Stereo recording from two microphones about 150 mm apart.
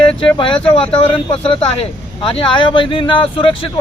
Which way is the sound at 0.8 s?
35° left (ahead or behind).